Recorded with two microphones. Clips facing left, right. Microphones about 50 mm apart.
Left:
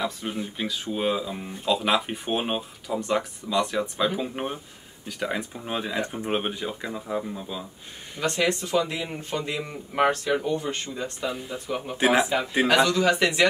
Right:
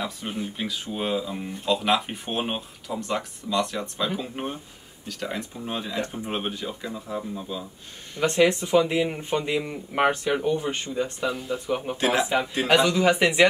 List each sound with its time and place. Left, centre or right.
0.0 s speech: centre
7.3 s speech: centre
8.2 s speech: centre
11.2 s speech: centre
11.6 s speech: centre
12.0 s speech: centre
12.6 s speech: centre